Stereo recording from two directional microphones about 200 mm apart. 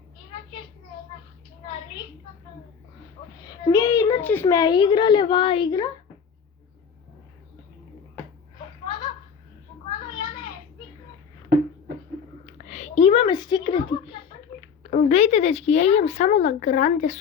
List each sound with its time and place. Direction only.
3.6 s a child's voice: 20° left (ahead or behind)
12.5 s speech: 35° left (ahead or behind)